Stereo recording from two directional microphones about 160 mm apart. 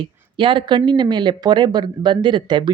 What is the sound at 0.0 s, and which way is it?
Speech, 30° right (ahead or behind).